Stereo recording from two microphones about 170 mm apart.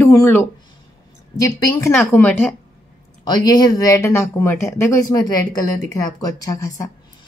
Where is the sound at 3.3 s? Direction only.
25° left (ahead or behind).